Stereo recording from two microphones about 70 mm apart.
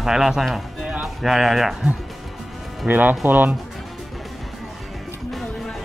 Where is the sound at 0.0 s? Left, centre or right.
Centre.